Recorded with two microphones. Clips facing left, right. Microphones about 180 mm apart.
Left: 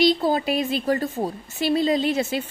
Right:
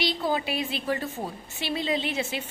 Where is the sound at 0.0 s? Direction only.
40° left (ahead or behind).